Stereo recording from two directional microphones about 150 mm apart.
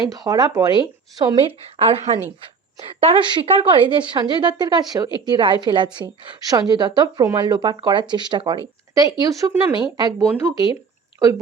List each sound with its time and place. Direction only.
0.1 s a woman's voice: 25° right (ahead or behind)